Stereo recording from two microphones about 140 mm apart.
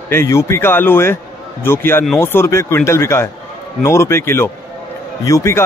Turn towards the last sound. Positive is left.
turn(degrees=20)  # may be behind; listen again after turning